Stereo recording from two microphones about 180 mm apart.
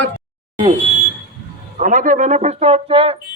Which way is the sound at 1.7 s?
45° right (ahead or behind).